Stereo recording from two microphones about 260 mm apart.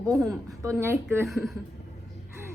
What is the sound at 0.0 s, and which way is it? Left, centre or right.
A woman's voice, centre.